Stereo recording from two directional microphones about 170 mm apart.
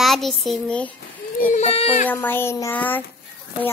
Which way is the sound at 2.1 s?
10° left (ahead or behind).